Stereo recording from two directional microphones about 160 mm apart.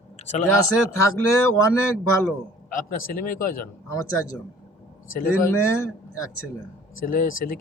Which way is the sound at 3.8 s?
20° left (ahead or behind).